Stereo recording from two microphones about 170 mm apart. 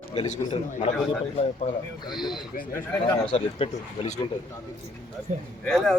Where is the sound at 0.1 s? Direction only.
35° left (ahead or behind).